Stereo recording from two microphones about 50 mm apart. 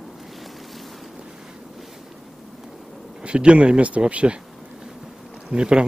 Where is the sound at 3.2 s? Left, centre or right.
Right.